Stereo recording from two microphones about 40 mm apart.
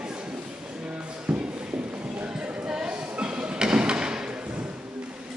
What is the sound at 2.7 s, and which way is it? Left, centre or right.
Thump, centre.